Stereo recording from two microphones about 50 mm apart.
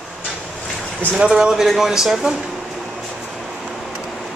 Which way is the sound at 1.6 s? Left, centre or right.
Centre.